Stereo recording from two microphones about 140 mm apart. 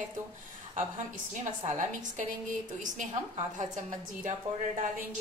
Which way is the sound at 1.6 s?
65° right (ahead or behind).